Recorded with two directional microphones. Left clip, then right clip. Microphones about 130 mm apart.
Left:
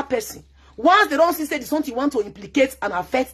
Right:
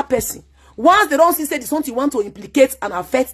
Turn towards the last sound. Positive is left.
turn(degrees=-30)  # may be behind; listen again after turning